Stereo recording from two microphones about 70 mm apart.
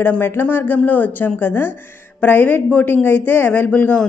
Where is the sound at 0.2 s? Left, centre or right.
Left.